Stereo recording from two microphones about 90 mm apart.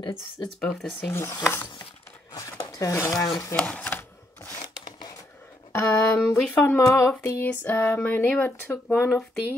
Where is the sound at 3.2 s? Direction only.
40° left (ahead or behind).